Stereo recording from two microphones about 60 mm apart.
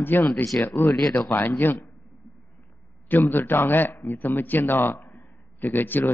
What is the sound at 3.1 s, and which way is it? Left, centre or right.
A man's voice, left.